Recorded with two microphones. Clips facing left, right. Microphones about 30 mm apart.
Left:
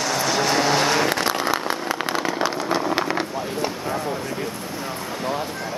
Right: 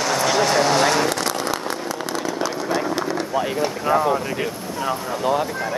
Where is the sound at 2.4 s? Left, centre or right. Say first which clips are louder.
Even; left.